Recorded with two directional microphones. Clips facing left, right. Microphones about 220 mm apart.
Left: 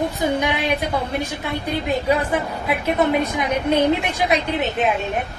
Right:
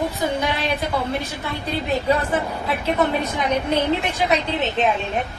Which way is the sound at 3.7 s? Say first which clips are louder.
Left 3 dB; 10° left (ahead or behind).